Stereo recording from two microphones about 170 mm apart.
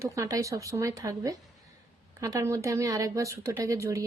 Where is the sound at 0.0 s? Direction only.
20° right (ahead or behind).